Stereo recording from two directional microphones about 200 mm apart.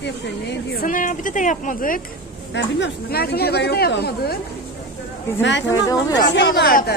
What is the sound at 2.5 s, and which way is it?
Speech, 55° left (ahead or behind).